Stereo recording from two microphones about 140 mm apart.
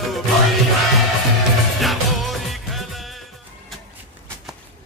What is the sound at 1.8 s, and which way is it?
Music, centre (ahead or behind).